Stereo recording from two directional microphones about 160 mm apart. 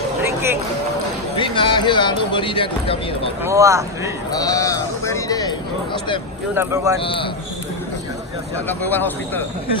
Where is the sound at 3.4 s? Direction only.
20° right (ahead or behind).